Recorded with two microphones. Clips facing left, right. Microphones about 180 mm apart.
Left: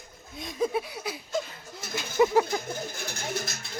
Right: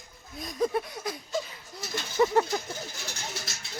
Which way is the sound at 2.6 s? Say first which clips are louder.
Left 4 dB; 50° left (ahead or behind).